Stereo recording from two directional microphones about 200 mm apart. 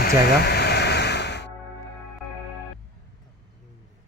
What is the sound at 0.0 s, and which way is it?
Music, 55° left (ahead or behind).